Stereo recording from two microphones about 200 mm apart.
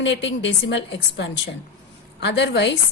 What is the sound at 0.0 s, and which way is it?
Speech, 65° left (ahead or behind).